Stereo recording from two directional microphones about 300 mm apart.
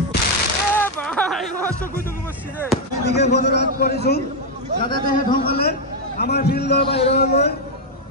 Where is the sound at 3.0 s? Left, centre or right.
Left.